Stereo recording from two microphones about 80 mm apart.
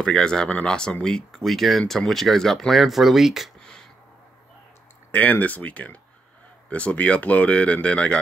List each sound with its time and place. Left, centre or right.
0.0 s speech: centre
5.1 s speech: left